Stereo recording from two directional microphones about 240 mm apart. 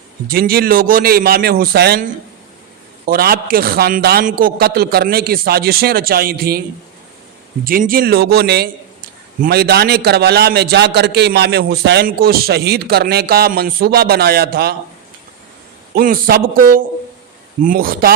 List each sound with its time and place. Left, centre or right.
0.3 s a man's voice: right
7.6 s a man's voice: right
16.0 s a man's voice: right